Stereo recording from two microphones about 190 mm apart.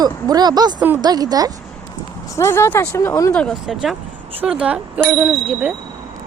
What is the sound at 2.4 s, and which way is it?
Speech, 15° left (ahead or behind).